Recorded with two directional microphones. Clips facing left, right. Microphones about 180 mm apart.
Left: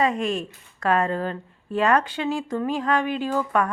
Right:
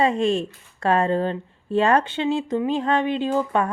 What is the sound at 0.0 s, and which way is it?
A woman's voice, 30° right (ahead or behind).